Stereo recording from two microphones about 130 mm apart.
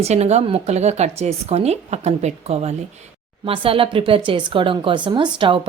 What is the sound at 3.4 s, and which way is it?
Speech, 45° right (ahead or behind).